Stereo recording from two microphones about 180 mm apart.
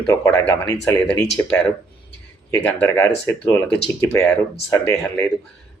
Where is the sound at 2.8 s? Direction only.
10° left (ahead or behind).